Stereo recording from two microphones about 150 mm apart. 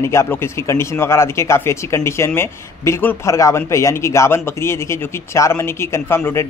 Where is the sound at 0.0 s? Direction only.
20° left (ahead or behind).